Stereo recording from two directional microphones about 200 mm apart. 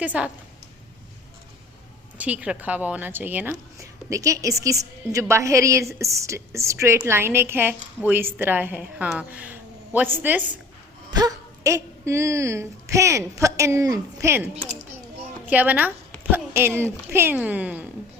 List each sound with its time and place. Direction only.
0.0 s speech: 5° right (ahead or behind)
2.1 s a woman's voice: 5° right (ahead or behind)